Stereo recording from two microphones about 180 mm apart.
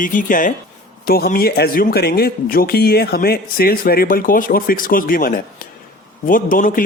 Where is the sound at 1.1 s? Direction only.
60° left (ahead or behind).